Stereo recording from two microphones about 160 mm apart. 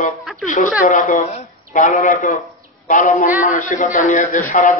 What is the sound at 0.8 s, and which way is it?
A man's voice, 55° left (ahead or behind).